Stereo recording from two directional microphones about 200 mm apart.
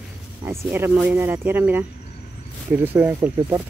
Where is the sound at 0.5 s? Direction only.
10° right (ahead or behind).